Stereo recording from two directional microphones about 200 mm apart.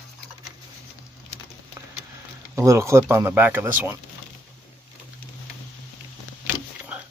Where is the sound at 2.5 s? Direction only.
15° right (ahead or behind).